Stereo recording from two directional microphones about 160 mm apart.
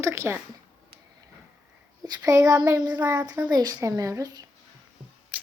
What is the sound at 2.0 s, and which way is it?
Speech, 25° right (ahead or behind).